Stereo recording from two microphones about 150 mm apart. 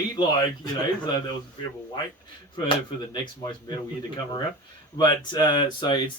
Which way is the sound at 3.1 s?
30° left (ahead or behind).